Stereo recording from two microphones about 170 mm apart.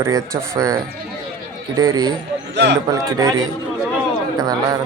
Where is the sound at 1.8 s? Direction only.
20° right (ahead or behind).